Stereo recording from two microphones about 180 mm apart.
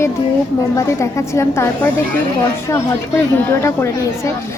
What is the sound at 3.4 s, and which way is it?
Speech, 15° left (ahead or behind).